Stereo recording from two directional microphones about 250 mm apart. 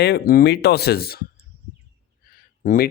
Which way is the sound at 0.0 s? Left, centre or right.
Left.